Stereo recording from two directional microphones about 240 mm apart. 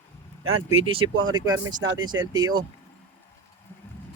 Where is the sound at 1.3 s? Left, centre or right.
Centre.